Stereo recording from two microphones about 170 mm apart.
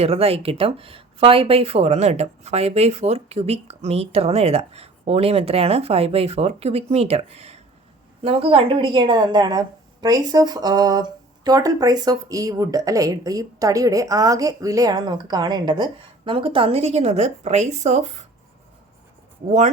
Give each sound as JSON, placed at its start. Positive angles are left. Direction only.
{"t": 0.0, "sound": "a woman's voice", "side_deg": -35}
{"t": 19.5, "sound": "speech", "side_deg": -45}